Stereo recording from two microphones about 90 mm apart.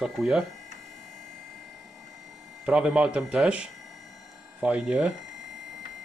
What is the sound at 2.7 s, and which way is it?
Speech, 10° right (ahead or behind).